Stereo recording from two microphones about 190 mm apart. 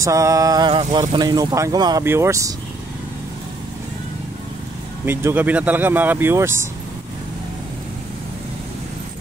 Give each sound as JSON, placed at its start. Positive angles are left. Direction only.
{"t": 0.0, "sound": "speech", "side_deg": -15}
{"t": 5.0, "sound": "speech", "side_deg": -10}